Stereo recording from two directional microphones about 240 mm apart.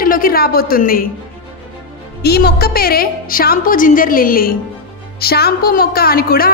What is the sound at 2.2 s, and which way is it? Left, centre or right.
A woman's voice, left.